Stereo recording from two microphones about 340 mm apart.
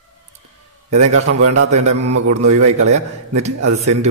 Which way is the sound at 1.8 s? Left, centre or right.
Right.